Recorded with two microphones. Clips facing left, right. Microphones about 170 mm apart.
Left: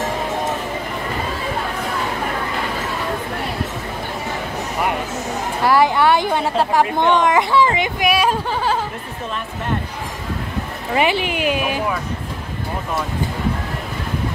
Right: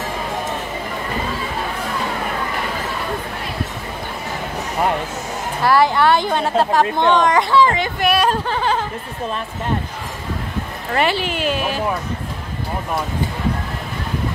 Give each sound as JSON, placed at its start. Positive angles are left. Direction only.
{"t": 5.7, "sound": "speech", "side_deg": 15}
{"t": 10.9, "sound": "speech", "side_deg": 10}